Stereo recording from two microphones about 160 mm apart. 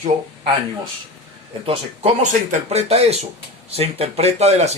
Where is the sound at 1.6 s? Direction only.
35° right (ahead or behind).